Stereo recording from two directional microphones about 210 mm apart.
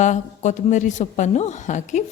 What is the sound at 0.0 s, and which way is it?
A woman's voice, 35° left (ahead or behind).